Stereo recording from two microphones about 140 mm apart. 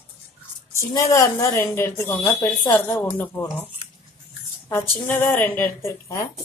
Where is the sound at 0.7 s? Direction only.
25° left (ahead or behind).